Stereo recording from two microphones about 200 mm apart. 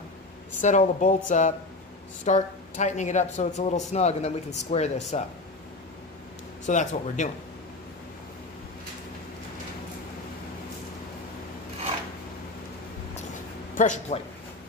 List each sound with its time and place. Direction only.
0.6 s speech: 40° left (ahead or behind)
6.6 s speech: 40° left (ahead or behind)
13.7 s speech: 40° left (ahead or behind)